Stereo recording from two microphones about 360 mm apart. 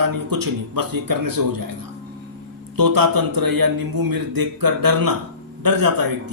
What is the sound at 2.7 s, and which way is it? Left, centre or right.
A man's voice, right.